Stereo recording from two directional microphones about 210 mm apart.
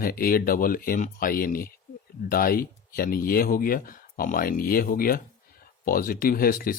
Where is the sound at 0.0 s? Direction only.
45° left (ahead or behind).